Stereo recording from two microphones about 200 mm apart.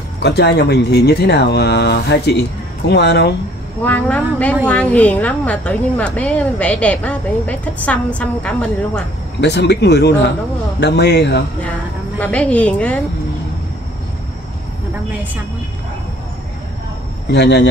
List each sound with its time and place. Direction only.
0.2 s speech: 55° left (ahead or behind)
3.8 s speech: 10° left (ahead or behind)
9.4 s speech: 55° left (ahead or behind)
12.2 s speech: 5° left (ahead or behind)
17.3 s speech: 55° left (ahead or behind)